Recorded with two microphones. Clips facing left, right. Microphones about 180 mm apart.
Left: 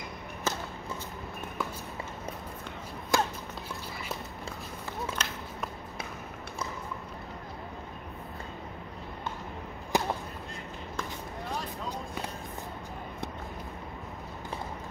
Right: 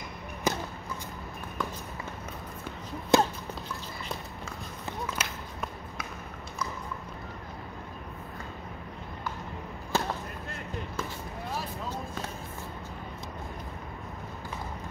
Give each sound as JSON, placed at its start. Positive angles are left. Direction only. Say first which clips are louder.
{"t": 0.5, "sound": "basketball bounce", "louder": "right 4 dB", "side_deg": -15}
{"t": 3.1, "sound": "a sound", "louder": "right 5 dB", "side_deg": -20}
{"t": 5.1, "sound": "run", "louder": "even", "side_deg": -10}
{"t": 9.9, "sound": "whip", "louder": "left 1 dB", "side_deg": 15}